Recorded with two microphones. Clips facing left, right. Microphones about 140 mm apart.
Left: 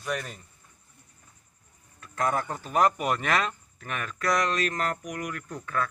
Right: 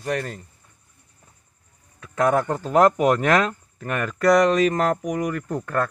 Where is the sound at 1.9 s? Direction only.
65° right (ahead or behind).